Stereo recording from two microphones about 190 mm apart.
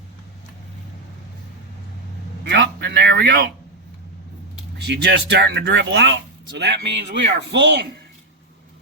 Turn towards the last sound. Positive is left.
turn(degrees=-65)  # may be behind; listen again after turning